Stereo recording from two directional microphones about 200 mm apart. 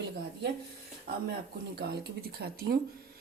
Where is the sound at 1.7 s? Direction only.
50° right (ahead or behind).